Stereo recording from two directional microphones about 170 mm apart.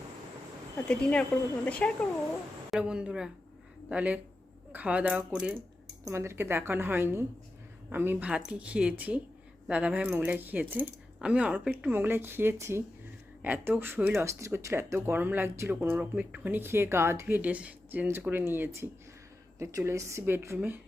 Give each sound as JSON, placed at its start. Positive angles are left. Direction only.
{"t": 0.9, "sound": "a woman's voice", "side_deg": 5}
{"t": 2.7, "sound": "a woman's voice", "side_deg": -5}